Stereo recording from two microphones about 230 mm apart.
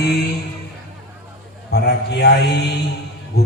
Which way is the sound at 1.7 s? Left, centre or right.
Left.